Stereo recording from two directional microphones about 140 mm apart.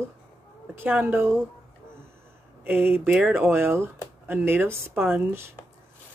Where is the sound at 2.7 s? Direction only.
15° right (ahead or behind).